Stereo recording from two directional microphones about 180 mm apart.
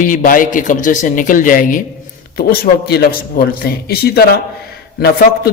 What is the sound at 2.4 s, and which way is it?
A man's voice, 60° left (ahead or behind).